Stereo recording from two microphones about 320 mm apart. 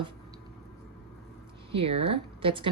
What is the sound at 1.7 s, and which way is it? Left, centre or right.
Speech, centre.